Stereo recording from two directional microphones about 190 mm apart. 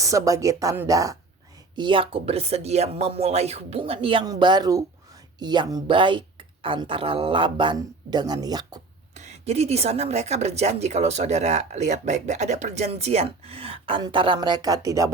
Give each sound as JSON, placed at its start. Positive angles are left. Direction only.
{"t": 0.0, "sound": "speech", "side_deg": -15}
{"t": 9.1, "sound": "a woman's voice", "side_deg": -35}